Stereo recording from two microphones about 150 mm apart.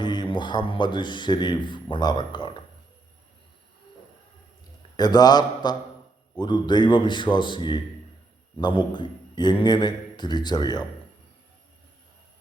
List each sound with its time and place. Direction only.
0.0 s speech: 30° left (ahead or behind)
4.9 s a man's voice: 25° left (ahead or behind)